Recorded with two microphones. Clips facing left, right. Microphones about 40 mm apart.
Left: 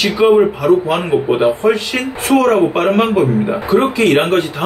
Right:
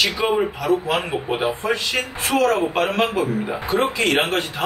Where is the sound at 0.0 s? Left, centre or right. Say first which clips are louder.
Left 9 dB; centre.